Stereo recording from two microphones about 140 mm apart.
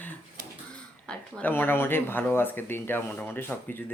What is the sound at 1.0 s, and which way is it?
Speech, 10° left (ahead or behind).